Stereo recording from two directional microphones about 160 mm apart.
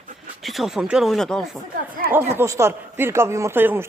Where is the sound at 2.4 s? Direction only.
15° right (ahead or behind).